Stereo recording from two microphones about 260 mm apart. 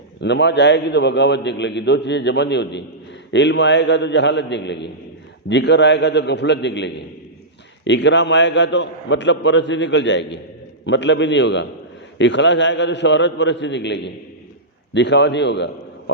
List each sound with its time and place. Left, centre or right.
0.2 s a man's voice: left